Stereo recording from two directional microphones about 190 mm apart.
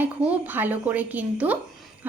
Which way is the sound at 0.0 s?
10° right (ahead or behind).